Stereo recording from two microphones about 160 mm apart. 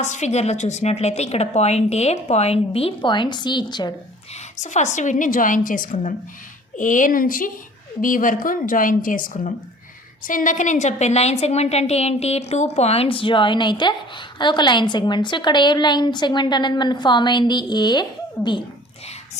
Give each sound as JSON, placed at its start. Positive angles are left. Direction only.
{"t": 0.0, "sound": "a woman's voice", "side_deg": 45}
{"t": 4.5, "sound": "a woman's voice", "side_deg": 50}